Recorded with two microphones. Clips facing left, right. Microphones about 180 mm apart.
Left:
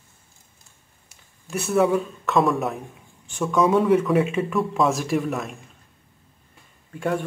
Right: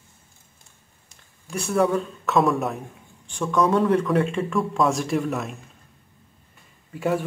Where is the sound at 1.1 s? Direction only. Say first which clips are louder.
Left 2 dB; 5° left (ahead or behind).